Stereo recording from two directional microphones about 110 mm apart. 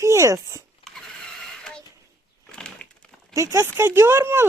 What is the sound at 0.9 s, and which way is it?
Mechanisms, 5° left (ahead or behind).